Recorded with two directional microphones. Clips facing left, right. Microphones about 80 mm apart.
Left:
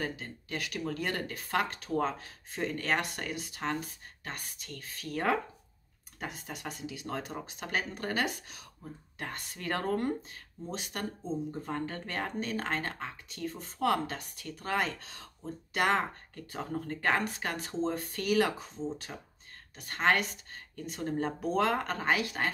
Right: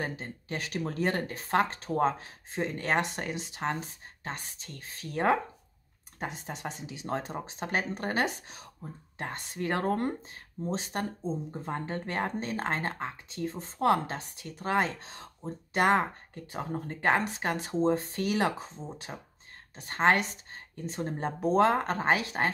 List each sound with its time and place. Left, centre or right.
0.0 s speech: right